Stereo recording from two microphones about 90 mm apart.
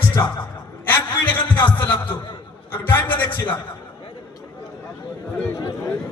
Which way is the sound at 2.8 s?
20° left (ahead or behind).